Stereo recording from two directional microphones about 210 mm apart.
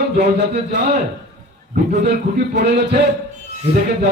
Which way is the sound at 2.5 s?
55° right (ahead or behind).